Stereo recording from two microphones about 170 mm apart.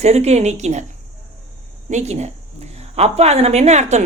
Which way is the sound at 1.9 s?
45° right (ahead or behind).